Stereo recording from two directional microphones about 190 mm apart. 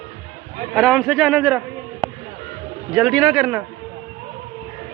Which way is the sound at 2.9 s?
Centre (ahead or behind).